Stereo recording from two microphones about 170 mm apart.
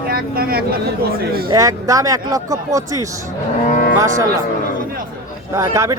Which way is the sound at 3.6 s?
45° left (ahead or behind).